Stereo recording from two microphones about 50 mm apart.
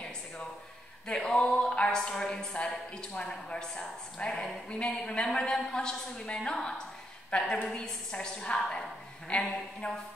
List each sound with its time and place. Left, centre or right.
1.0 s a woman's voice: centre
4.7 s a woman's voice: left